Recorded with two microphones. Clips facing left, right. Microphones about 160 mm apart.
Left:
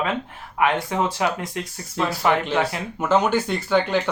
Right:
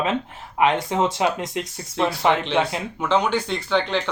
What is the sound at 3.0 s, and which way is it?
Speech, 5° left (ahead or behind).